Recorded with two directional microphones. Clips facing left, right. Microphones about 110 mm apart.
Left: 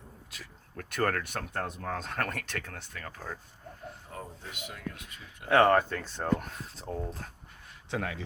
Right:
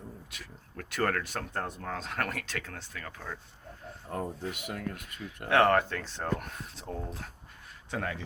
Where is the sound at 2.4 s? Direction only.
55° left (ahead or behind); by 3.4 s 40° left (ahead or behind).